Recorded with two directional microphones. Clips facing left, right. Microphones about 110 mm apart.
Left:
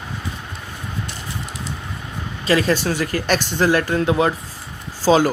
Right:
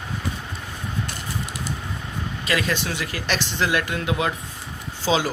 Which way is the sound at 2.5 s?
35° left (ahead or behind).